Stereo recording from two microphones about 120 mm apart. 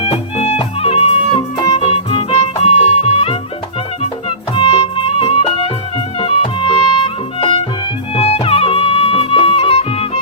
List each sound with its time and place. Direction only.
0.0 s music: 60° left (ahead or behind)